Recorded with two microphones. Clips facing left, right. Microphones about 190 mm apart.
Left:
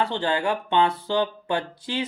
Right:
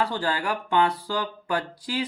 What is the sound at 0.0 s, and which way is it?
Speech, 25° left (ahead or behind).